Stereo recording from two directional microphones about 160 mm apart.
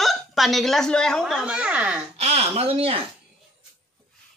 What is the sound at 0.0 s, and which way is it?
Speech, centre (ahead or behind).